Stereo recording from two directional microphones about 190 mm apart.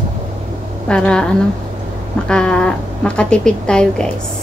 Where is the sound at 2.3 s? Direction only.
5° left (ahead or behind).